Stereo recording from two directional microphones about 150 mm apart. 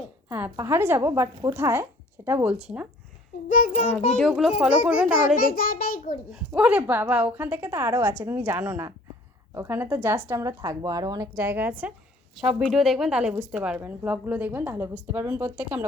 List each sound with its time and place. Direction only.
0.3 s a woman's voice: 10° right (ahead or behind)
4.2 s a child's voice: centre (ahead or behind)
5.1 s a child's voice: 75° left (ahead or behind)
6.3 s a woman's voice: 10° right (ahead or behind); by 11.4 s 25° right (ahead or behind)
11.4 s a woman's voice: 15° right (ahead or behind)